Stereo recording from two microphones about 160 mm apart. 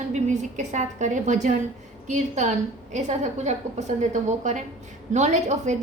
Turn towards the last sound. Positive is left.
turn(degrees=-45)  # may be behind; listen again after turning